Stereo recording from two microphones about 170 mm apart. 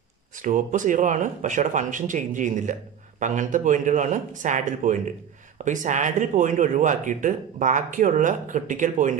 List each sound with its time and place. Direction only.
0.4 s speech: 50° right (ahead or behind)